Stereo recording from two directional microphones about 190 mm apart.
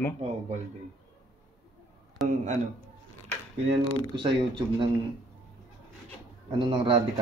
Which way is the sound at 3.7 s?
25° right (ahead or behind).